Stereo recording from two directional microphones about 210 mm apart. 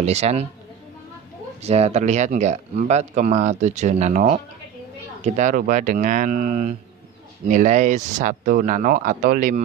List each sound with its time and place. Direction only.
0.0 s speech: 30° right (ahead or behind)
1.6 s speech: 30° right (ahead or behind)